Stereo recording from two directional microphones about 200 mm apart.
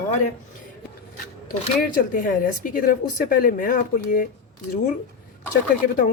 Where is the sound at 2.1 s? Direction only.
40° left (ahead or behind).